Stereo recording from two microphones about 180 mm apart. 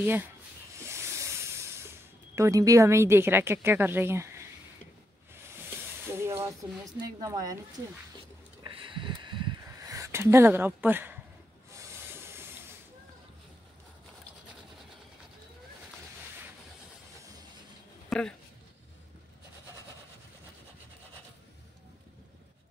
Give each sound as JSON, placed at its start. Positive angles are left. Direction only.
{"t": 0.0, "sound": "speech", "side_deg": -10}
{"t": 0.7, "sound": "hiss", "side_deg": -15}
{"t": 2.3, "sound": "speech", "side_deg": -15}
{"t": 5.3, "sound": "a sound", "side_deg": -15}
{"t": 8.6, "sound": "a sound", "side_deg": -25}
{"t": 11.7, "sound": "rub", "side_deg": -15}
{"t": 18.1, "sound": "speech", "side_deg": 0}